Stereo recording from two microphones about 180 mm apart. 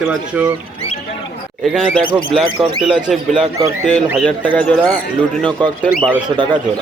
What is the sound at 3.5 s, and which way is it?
Speech, 20° right (ahead or behind).